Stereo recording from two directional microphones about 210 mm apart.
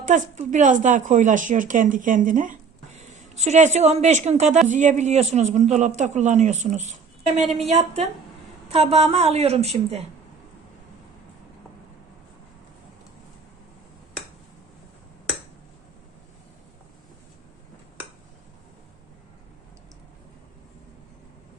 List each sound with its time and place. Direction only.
0.0 s a woman's voice: 35° right (ahead or behind)